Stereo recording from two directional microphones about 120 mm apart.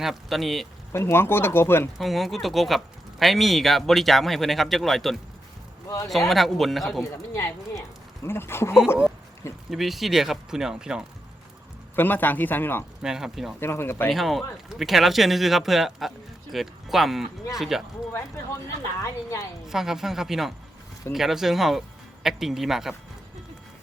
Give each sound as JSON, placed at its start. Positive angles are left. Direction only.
{"t": 0.0, "sound": "speech", "side_deg": 0}
{"t": 0.9, "sound": "speech", "side_deg": 20}
{"t": 2.0, "sound": "speech", "side_deg": 0}
{"t": 7.0, "sound": "speech", "side_deg": 25}
{"t": 9.6, "sound": "speech", "side_deg": 0}
{"t": 11.9, "sound": "speech", "side_deg": 15}
{"t": 13.0, "sound": "speech", "side_deg": -5}
{"t": 13.6, "sound": "speech", "side_deg": 20}
{"t": 14.1, "sound": "speech", "side_deg": 0}
{"t": 19.0, "sound": "speech", "side_deg": 25}
{"t": 19.6, "sound": "speech", "side_deg": -5}